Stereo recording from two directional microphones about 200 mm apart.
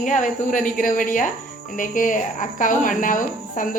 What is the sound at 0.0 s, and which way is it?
A woman's voice, 40° left (ahead or behind).